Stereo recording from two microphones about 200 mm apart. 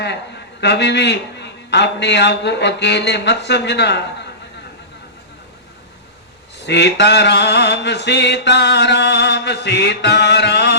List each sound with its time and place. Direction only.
0.6 s mantra: 60° left (ahead or behind)
6.6 s mantra: 60° left (ahead or behind)